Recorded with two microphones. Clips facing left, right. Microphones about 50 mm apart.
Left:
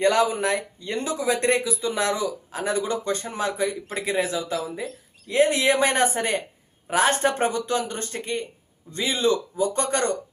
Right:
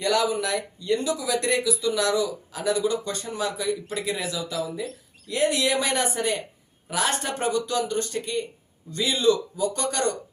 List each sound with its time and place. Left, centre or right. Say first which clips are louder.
0.0 s speech: left 3 dB; left